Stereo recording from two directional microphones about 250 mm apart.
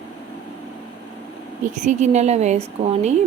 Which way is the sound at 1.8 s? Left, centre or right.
Right.